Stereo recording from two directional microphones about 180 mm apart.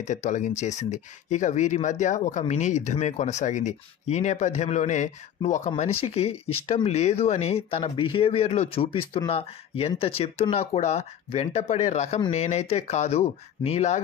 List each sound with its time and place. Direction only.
0.0 s speech: 40° left (ahead or behind)